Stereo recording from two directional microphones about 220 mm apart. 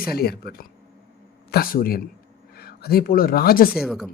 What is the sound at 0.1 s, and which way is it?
Speech, 45° left (ahead or behind).